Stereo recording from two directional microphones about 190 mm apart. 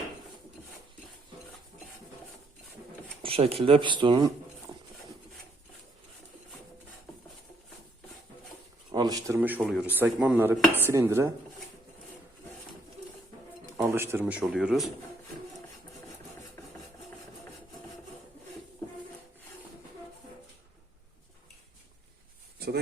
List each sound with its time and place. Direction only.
3.2 s speech: 30° right (ahead or behind)
8.9 s speech: 20° right (ahead or behind)
13.8 s speech: 10° right (ahead or behind)
22.5 s a sound: 55° right (ahead or behind)